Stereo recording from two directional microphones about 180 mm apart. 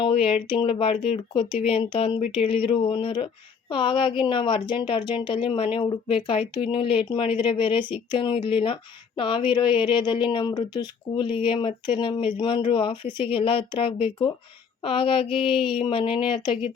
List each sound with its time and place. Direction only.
0.0 s speech: 30° left (ahead or behind)